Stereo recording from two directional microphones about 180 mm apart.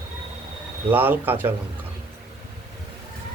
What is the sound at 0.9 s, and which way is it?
Speech, 10° right (ahead or behind).